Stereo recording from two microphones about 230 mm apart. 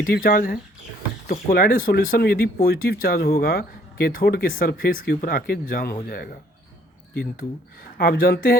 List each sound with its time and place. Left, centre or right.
0.0 s speech: left